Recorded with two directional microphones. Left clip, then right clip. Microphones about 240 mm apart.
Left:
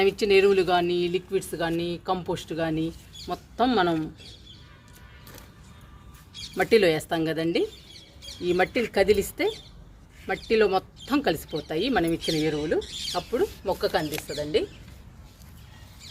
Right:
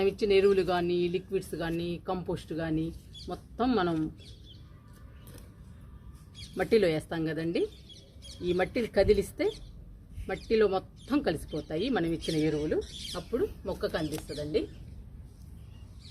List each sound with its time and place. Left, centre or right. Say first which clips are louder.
0.0 s speech: left 5 dB; left
6.6 s speech: left 5 dB; left